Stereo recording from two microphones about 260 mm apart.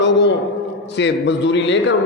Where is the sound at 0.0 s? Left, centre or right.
Left.